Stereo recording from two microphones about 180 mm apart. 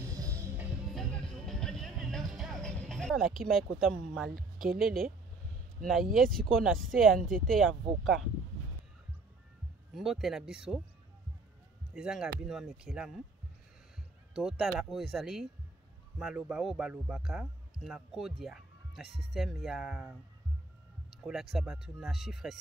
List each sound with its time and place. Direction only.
0.1 s music: 20° right (ahead or behind)
0.9 s music: 5° left (ahead or behind)
3.8 s a man's voice: centre (ahead or behind)
6.1 s a man's voice: centre (ahead or behind)
9.9 s a man's voice: centre (ahead or behind)
11.9 s a man's voice: 5° right (ahead or behind)
14.3 s a man's voice: centre (ahead or behind)